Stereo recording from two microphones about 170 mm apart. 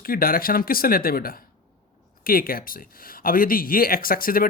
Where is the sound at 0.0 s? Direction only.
60° left (ahead or behind).